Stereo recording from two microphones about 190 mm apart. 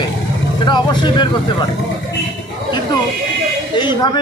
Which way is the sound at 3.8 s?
25° left (ahead or behind).